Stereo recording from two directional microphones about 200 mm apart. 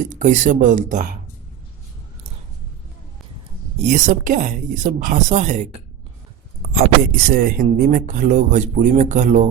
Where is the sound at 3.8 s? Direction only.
40° right (ahead or behind).